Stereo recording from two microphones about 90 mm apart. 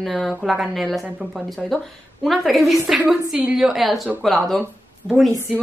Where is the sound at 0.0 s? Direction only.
Centre (ahead or behind).